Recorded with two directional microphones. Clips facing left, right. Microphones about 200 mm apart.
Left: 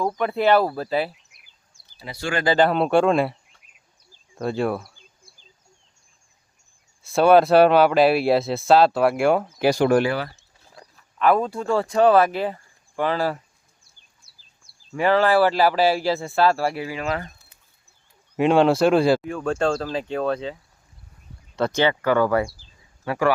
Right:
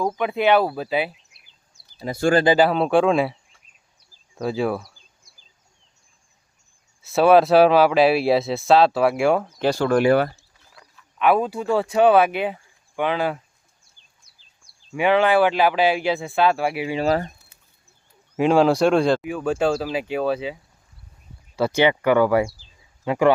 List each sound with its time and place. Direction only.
0.0 s speech: 5° right (ahead or behind)
2.0 s speech: 45° right (ahead or behind)
2.6 s speech: centre (ahead or behind)
4.1 s a sound: centre (ahead or behind)
7.0 s speech: centre (ahead or behind)
9.6 s speech: 15° left (ahead or behind)
10.1 s speech: 50° right (ahead or behind)
10.7 s a sound: 40° left (ahead or behind)
11.2 s speech: 5° right (ahead or behind)
16.8 s speech: 30° right (ahead or behind)
18.3 s speech: centre (ahead or behind)
19.2 s speech: 5° right (ahead or behind)